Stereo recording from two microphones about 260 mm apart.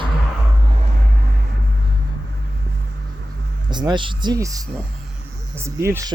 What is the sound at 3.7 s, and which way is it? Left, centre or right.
Speech, centre.